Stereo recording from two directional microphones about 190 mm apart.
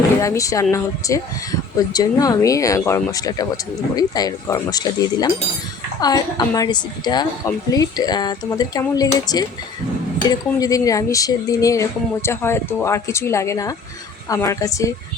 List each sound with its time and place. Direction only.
0.2 s a woman's voice: 15° left (ahead or behind)